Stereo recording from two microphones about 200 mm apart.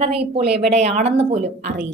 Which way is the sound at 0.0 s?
30° right (ahead or behind).